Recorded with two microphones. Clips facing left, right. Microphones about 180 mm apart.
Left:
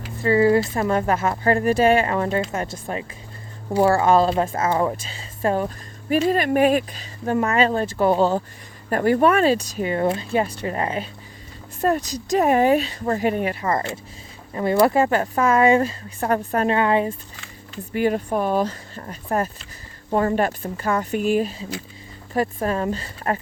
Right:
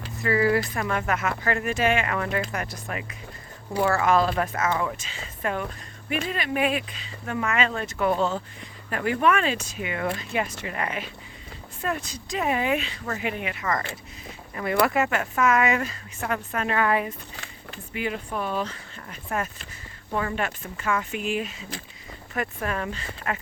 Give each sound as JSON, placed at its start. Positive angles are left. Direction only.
{"t": 0.2, "sound": "speech", "side_deg": 25}
{"t": 6.2, "sound": "speech", "side_deg": 45}
{"t": 17.9, "sound": "speech", "side_deg": 45}